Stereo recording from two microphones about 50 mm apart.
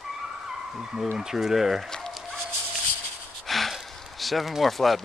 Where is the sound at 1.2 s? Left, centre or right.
Centre.